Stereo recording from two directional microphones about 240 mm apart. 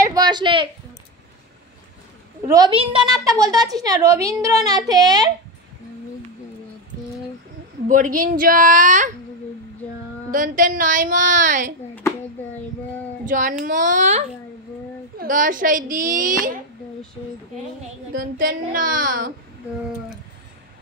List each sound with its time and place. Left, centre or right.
0.0 s a sound: centre
2.4 s a woman's voice: centre
7.9 s a woman's voice: right
10.3 s a woman's voice: right
13.2 s a woman's voice: right
18.1 s a woman's voice: right